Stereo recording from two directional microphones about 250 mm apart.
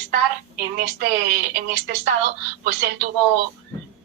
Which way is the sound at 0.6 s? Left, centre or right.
Right.